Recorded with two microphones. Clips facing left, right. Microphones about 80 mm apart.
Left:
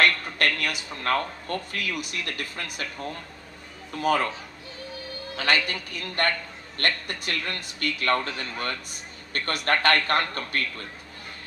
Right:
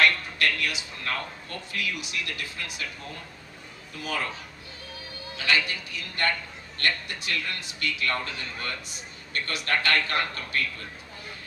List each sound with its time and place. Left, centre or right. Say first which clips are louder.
0.0 s speech: left 1 dB; left
3.9 s a man's voice: left 8 dB; left
5.4 s a man's voice: left 2 dB; left